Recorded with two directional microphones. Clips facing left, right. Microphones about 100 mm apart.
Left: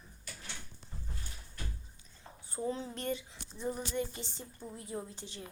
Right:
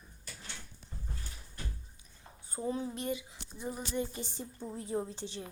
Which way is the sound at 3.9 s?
20° right (ahead or behind).